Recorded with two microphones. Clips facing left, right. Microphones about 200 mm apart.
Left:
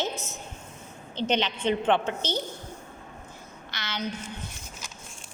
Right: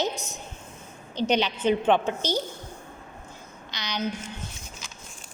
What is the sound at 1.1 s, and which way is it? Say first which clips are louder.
A woman's voice: right 2 dB; 10° right (ahead or behind).